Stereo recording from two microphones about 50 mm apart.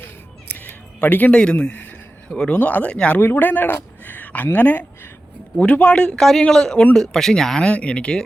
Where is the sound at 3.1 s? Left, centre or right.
Left.